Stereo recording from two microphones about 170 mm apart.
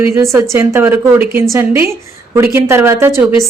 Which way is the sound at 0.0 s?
15° right (ahead or behind).